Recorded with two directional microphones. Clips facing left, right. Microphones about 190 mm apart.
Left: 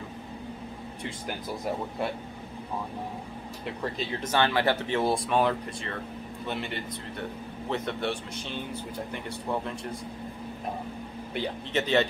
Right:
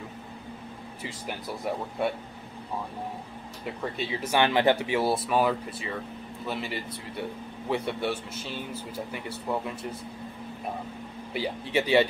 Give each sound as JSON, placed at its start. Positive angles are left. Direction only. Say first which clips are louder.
{"t": 1.0, "sound": "speech", "louder": "even", "side_deg": 0}
{"t": 3.8, "sound": "speech", "louder": "right 1 dB", "side_deg": -5}
{"t": 11.3, "sound": "speech", "louder": "right 2 dB", "side_deg": -10}